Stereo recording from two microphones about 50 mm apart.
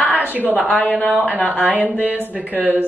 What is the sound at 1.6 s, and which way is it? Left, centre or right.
Speech, right.